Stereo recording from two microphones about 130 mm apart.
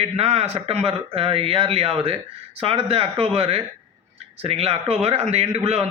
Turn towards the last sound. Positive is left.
turn(degrees=-50)  # may be behind; listen again after turning